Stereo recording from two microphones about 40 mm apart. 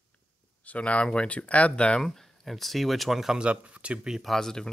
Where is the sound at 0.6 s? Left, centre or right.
Left.